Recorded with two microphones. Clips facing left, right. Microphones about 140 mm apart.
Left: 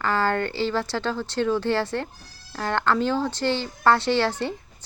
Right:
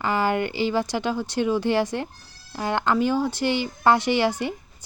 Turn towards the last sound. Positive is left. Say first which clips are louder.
# right 1 dB
turn(degrees=-15)  # may be behind; listen again after turning